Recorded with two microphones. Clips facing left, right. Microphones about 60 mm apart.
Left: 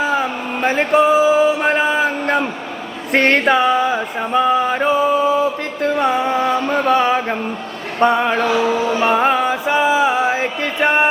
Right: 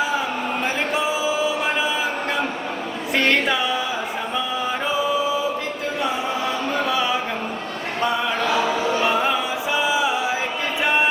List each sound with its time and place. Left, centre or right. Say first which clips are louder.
0.6 s a sound: left 12 dB; left
3.1 s music: left 6 dB; left
4.4 s mantra: left 11 dB; left
5.8 s music: left 10 dB; left
6.8 s a sound: left 7 dB; left
9.0 s music: left 5 dB; left